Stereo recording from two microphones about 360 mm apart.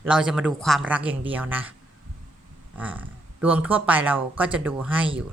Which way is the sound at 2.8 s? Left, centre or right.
Centre.